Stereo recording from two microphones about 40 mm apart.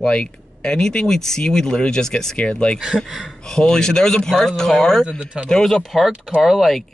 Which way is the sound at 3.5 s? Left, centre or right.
Centre.